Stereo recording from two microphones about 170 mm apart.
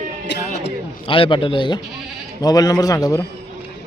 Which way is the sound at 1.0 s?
30° left (ahead or behind).